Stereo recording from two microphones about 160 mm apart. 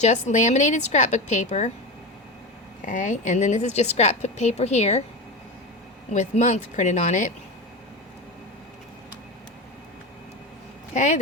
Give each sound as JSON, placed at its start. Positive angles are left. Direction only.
{"t": 0.0, "sound": "a woman's voice", "side_deg": 45}
{"t": 2.8, "sound": "a woman's voice", "side_deg": 55}
{"t": 6.1, "sound": "a woman's voice", "side_deg": 45}
{"t": 10.9, "sound": "a woman's voice", "side_deg": 50}